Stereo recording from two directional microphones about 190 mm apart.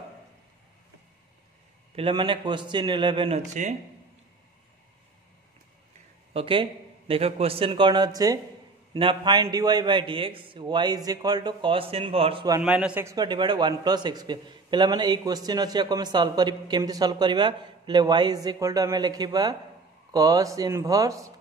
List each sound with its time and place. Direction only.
2.0 s a man's voice: 25° right (ahead or behind)
6.3 s a man's voice: 30° right (ahead or behind)
12.5 s a man's voice: 5° right (ahead or behind)